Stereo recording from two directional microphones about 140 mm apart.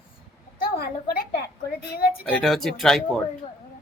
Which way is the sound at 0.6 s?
90° left.